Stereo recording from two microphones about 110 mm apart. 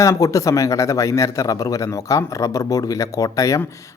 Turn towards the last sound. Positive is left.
turn(degrees=30)  # may be behind; listen again after turning